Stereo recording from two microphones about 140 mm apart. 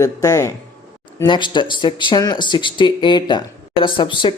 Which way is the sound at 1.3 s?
35° left (ahead or behind).